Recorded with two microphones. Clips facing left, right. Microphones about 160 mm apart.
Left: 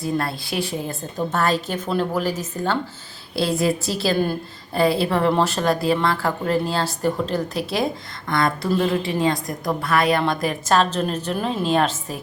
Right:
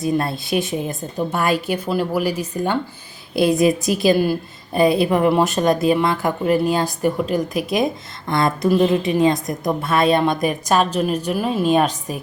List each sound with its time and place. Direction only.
0.0 s a woman's voice: 20° right (ahead or behind)